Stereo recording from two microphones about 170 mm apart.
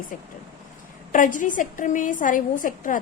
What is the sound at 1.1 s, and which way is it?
A woman's voice, 50° left (ahead or behind).